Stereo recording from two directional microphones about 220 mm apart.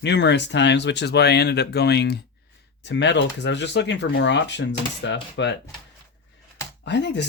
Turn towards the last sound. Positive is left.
turn(degrees=50)  # may be behind; listen again after turning